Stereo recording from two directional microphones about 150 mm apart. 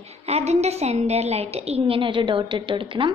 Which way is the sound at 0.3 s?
45° right (ahead or behind).